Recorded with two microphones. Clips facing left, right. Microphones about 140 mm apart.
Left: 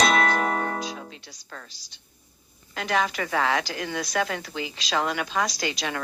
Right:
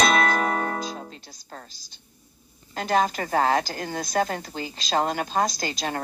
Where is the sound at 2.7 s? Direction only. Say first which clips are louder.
Right 3 dB; 40° right (ahead or behind).